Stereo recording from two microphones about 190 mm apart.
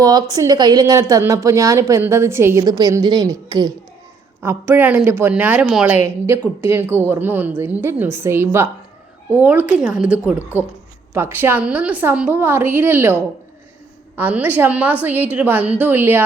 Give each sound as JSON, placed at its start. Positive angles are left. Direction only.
{"t": 0.0, "sound": "a woman's voice", "side_deg": -20}
{"t": 14.2, "sound": "speech", "side_deg": -10}